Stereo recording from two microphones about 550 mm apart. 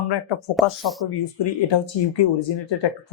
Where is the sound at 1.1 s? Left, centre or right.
Left.